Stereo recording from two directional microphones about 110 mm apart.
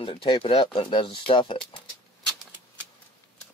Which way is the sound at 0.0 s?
55° left (ahead or behind).